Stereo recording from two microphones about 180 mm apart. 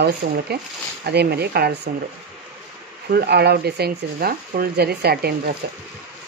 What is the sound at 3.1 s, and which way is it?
Speech, 60° right (ahead or behind).